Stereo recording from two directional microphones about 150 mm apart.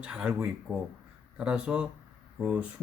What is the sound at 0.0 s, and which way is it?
Speech, 5° right (ahead or behind).